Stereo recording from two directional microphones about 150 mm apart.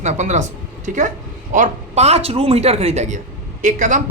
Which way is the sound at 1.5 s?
50° right (ahead or behind).